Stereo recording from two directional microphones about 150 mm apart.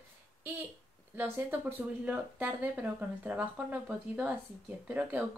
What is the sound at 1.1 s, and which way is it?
A woman's voice, 15° right (ahead or behind).